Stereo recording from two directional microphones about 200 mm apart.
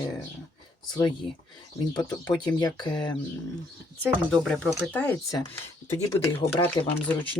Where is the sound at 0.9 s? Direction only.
20° left (ahead or behind).